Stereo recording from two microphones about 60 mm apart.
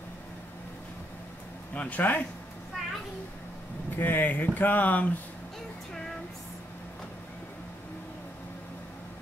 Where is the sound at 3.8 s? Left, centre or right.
Left.